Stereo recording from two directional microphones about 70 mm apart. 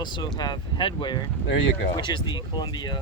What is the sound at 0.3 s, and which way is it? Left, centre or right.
Speech, left.